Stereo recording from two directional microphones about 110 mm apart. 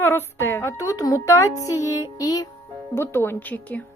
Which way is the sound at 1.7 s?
30° left (ahead or behind).